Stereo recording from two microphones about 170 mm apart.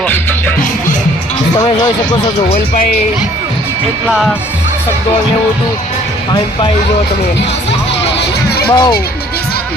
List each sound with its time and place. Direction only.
8.2 s music: 70° left (ahead or behind)
8.7 s speech: 25° left (ahead or behind)